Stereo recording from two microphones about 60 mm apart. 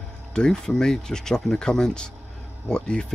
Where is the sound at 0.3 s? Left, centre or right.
Centre.